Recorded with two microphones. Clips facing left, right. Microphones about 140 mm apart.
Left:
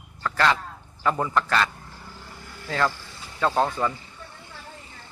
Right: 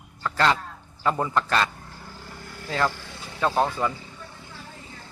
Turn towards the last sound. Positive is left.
turn(degrees=-10)  # may be behind; listen again after turning